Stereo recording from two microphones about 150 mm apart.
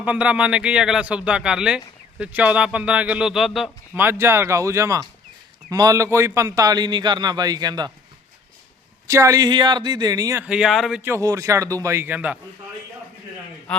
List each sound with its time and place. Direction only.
0.0 s a man's voice: 10° right (ahead or behind)
3.9 s a man's voice: 15° right (ahead or behind)
9.0 s a man's voice: 20° right (ahead or behind)
10.4 s speech: 5° right (ahead or behind)
11.0 s a man's voice: 20° right (ahead or behind)
13.7 s a man's voice: 10° left (ahead or behind)